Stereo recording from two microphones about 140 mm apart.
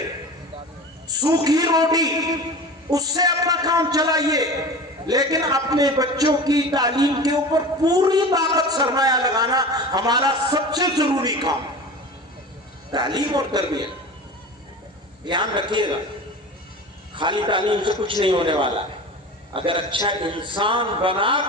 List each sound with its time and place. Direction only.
1.0 s a man's voice: 25° right (ahead or behind)
12.9 s a man's voice: 30° right (ahead or behind)
15.2 s a man's voice: 35° right (ahead or behind)
17.2 s a man's voice: 35° right (ahead or behind)